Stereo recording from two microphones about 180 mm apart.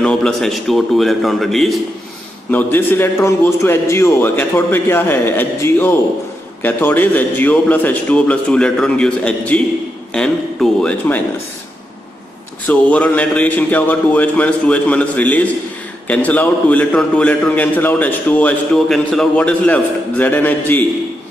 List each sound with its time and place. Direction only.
0.0 s a man's voice: 5° left (ahead or behind)
2.5 s a man's voice: 10° left (ahead or behind)
12.6 s a man's voice: 5° left (ahead or behind)